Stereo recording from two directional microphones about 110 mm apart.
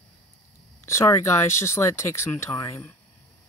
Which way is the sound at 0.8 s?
25° left (ahead or behind).